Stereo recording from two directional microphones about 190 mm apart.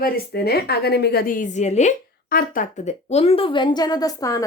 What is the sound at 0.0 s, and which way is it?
A woman's voice, 55° left (ahead or behind).